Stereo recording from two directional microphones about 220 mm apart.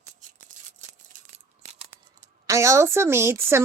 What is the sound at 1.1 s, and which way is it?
Scissors, 35° right (ahead or behind).